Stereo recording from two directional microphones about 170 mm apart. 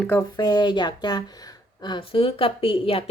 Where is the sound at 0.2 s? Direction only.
25° left (ahead or behind).